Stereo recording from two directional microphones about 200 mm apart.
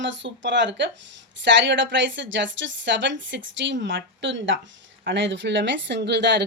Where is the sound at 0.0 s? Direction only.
65° right (ahead or behind).